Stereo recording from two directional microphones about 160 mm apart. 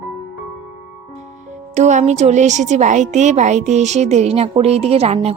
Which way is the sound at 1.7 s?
45° right (ahead or behind).